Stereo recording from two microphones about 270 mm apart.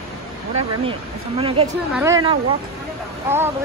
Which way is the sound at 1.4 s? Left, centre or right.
Right.